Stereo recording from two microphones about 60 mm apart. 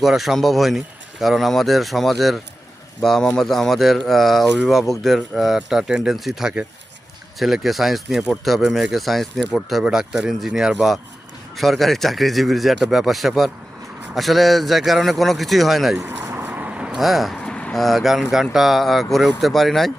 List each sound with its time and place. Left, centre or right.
0.0 s a man's voice: centre
9.8 s a man's voice: centre
16.0 s vehicle: right; by 17.0 s centre
17.0 s a man's voice: centre
17.4 s vehicle: centre
17.7 s a man's voice: centre